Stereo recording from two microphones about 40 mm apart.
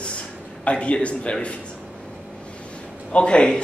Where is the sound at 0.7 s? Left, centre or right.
Left.